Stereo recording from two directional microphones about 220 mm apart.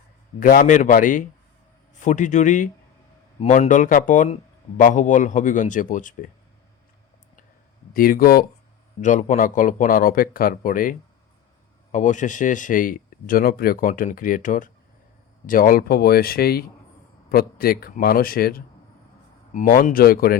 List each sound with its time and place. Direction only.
0.3 s speech: 40° left (ahead or behind)
7.9 s speech: 40° left (ahead or behind)